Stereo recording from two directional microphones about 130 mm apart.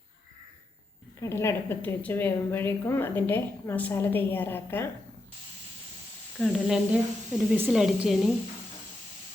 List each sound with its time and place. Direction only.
1.2 s a woman's voice: 20° left (ahead or behind)
6.4 s speech: 5° right (ahead or behind)